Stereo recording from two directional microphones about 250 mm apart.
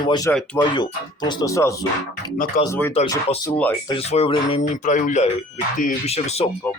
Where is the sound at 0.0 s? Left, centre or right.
Centre.